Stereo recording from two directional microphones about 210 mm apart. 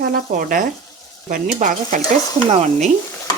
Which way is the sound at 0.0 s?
45° right (ahead or behind).